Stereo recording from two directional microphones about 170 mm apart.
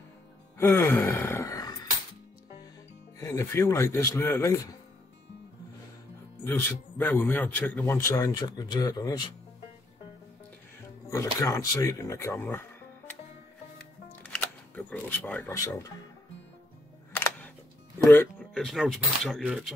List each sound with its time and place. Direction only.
0.6 s sigh: 15° left (ahead or behind)
3.2 s a man's voice: 15° left (ahead or behind)
6.4 s a man's voice: 10° left (ahead or behind)
11.1 s speech: 20° left (ahead or behind)
14.2 s camera: 10° left (ahead or behind)
15.4 s a man's voice: 15° left (ahead or behind)
18.1 s speech: 10° left (ahead or behind)